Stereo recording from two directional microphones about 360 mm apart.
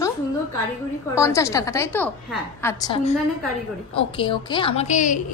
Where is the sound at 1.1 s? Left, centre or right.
Centre.